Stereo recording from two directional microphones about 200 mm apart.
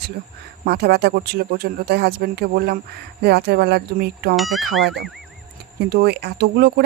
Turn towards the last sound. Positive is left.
turn(degrees=-55)  # may be behind; listen again after turning